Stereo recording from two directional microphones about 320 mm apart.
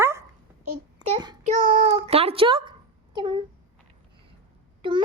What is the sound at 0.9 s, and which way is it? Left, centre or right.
Child singing, centre.